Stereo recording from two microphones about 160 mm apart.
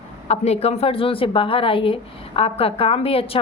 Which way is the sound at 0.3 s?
40° left (ahead or behind).